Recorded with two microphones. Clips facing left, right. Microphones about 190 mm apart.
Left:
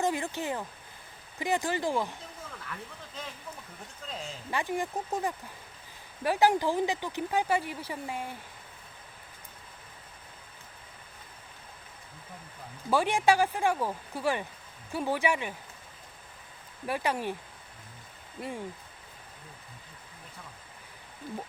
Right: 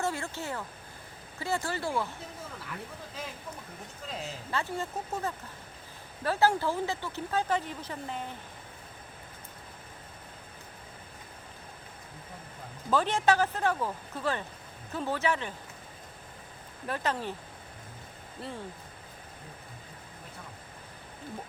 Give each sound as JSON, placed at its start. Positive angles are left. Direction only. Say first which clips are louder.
{"t": 0.0, "sound": "a sound", "louder": "left 3 dB", "side_deg": 15}
{"t": 1.4, "sound": "speech", "louder": "left 3 dB", "side_deg": 15}
{"t": 4.1, "sound": "speech", "louder": "right 1 dB", "side_deg": -5}
{"t": 4.5, "sound": "speech", "louder": "left 2 dB", "side_deg": 15}
{"t": 12.9, "sound": "speech", "louder": "left 1 dB", "side_deg": 10}
{"t": 16.8, "sound": "speech", "louder": "left 2 dB", "side_deg": 10}
{"t": 18.3, "sound": "speech", "louder": "left 3 dB", "side_deg": 15}